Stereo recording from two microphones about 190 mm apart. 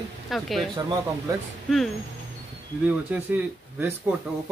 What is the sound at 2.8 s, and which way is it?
Speech, 10° right (ahead or behind).